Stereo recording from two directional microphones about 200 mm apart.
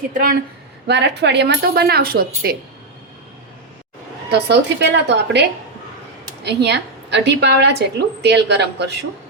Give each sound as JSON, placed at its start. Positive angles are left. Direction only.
{"t": 0.1, "sound": "speech", "side_deg": -45}
{"t": 0.9, "sound": "speech", "side_deg": -60}
{"t": 4.3, "sound": "a woman's voice", "side_deg": -55}